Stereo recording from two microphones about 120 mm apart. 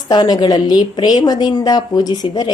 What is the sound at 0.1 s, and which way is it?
A woman's voice, 40° left (ahead or behind).